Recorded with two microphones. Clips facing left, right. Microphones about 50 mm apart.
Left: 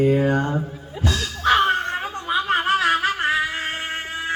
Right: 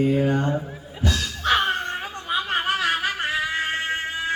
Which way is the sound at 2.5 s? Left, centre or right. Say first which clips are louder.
Left 5 dB; centre.